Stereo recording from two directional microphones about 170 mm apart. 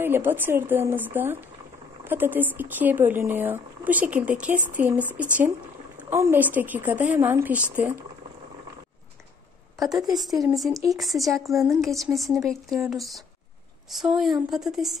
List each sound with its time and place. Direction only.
0.0 s speech: 10° right (ahead or behind)
9.8 s speech: centre (ahead or behind)
10.7 s speech: 20° right (ahead or behind)
11.0 s speech: centre (ahead or behind)